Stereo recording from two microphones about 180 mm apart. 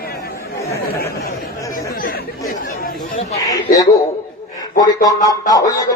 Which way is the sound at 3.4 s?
20° left (ahead or behind).